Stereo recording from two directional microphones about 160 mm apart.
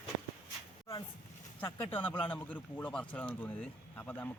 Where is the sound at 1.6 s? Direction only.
10° left (ahead or behind).